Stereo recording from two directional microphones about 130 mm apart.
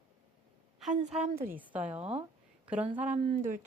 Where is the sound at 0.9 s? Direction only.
60° right (ahead or behind).